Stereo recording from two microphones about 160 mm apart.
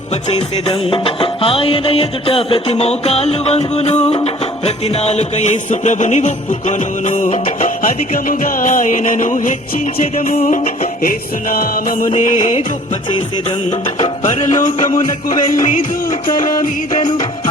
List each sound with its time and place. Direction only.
0.3 s music: 35° left (ahead or behind)
13.7 s music: 45° left (ahead or behind)